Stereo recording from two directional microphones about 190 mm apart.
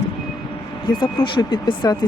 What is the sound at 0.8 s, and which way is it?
Speech, 25° left (ahead or behind).